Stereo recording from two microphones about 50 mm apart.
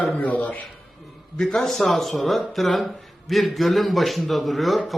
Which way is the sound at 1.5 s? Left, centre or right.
Centre.